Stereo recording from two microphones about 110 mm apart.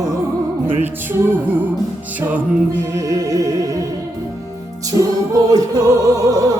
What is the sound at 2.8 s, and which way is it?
Music, 30° right (ahead or behind).